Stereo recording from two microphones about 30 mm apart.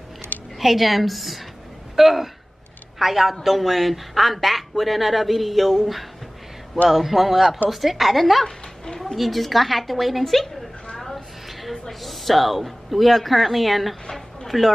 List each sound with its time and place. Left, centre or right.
0.6 s speech: centre
8.5 s a sound: centre
9.0 s speech: centre
11.9 s speech: centre